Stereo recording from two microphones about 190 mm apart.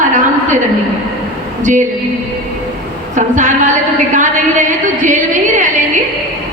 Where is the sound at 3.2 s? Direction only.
40° right (ahead or behind).